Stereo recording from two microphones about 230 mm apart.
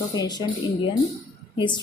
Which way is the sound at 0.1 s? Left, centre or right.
Centre.